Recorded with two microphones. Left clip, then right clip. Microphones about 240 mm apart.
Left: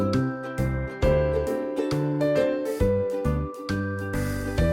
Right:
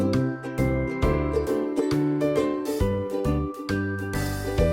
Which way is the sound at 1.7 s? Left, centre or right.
Centre.